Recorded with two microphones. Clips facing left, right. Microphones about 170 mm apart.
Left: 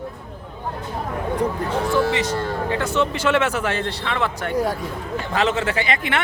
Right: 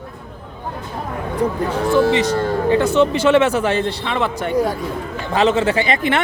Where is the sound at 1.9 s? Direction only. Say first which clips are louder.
Right 7 dB; 30° right (ahead or behind).